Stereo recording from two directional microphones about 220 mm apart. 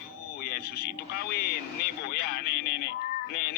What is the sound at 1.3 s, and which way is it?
Speech, 45° left (ahead or behind).